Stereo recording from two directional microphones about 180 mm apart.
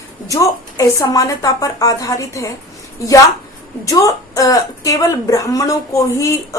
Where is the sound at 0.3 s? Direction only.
20° left (ahead or behind).